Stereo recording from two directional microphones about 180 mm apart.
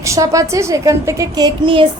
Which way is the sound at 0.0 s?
15° right (ahead or behind).